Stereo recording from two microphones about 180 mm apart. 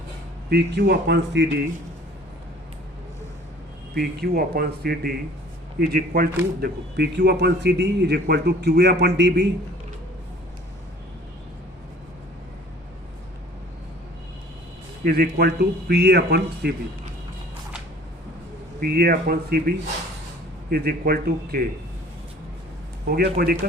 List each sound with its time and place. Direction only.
0.5 s a man's voice: 65° right (ahead or behind)
3.9 s speech: 60° right (ahead or behind)
6.6 s a man's voice: 65° right (ahead or behind)
15.0 s speech: 60° right (ahead or behind)
18.8 s speech: 60° right (ahead or behind)
23.0 s speech: 60° right (ahead or behind)